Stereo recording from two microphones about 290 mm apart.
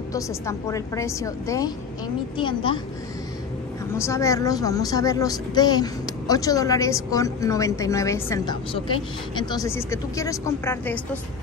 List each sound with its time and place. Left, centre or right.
0.1 s a woman's voice: centre
3.9 s a woman's voice: centre